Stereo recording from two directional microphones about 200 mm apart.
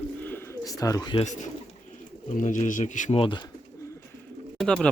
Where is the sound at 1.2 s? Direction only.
35° left (ahead or behind).